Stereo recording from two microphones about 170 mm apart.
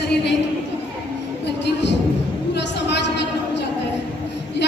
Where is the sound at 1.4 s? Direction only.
85° left.